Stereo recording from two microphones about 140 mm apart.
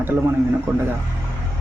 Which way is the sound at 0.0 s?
15° right (ahead or behind).